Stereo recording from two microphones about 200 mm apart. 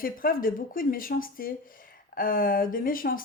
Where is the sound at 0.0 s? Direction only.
45° left (ahead or behind).